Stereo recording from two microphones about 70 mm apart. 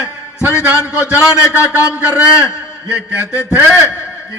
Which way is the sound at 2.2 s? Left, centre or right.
Left.